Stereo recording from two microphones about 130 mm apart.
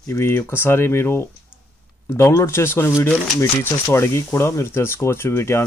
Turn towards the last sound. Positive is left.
turn(degrees=20)  # may be behind; listen again after turning